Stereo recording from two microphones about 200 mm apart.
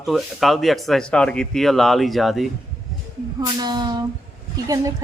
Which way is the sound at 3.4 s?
20° right (ahead or behind).